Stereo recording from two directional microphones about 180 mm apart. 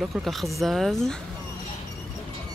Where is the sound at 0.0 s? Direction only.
Centre (ahead or behind).